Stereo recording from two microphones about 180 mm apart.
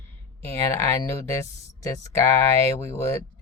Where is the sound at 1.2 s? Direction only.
15° left (ahead or behind).